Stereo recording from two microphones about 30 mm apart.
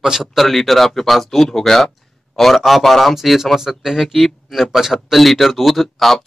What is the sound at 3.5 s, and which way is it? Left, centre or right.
Speech, centre.